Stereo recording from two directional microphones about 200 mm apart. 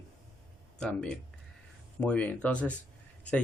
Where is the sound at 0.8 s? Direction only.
5° left (ahead or behind).